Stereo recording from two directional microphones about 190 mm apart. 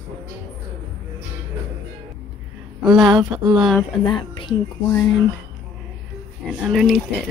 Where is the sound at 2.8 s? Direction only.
Centre (ahead or behind).